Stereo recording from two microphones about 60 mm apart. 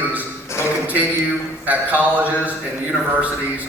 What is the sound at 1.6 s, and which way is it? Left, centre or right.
Speech, right.